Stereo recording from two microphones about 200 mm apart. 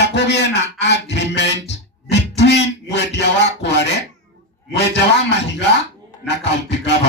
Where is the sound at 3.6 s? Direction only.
60° left (ahead or behind).